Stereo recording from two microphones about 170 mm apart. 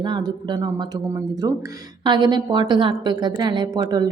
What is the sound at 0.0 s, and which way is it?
A woman's voice, 25° right (ahead or behind).